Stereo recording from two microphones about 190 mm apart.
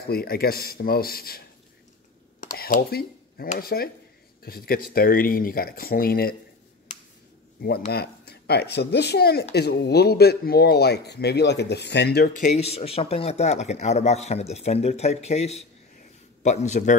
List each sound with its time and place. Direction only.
0.0 s speech: 55° left (ahead or behind)
2.5 s computer keyboard: 55° left (ahead or behind)
3.4 s speech: 55° left (ahead or behind)
7.6 s speech: 50° left (ahead or behind)
12.5 s speech: 35° left (ahead or behind)